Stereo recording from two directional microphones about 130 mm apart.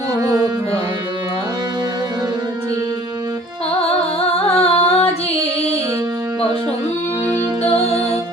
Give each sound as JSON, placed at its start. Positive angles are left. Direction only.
{"t": 4.5, "sound": "music", "side_deg": 50}